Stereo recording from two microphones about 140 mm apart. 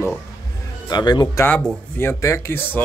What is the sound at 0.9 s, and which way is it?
Speech, 30° left (ahead or behind).